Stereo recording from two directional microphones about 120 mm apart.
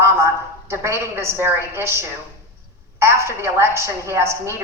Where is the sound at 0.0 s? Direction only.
20° right (ahead or behind).